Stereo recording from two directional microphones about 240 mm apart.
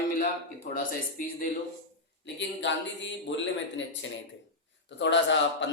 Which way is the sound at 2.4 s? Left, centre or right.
Left.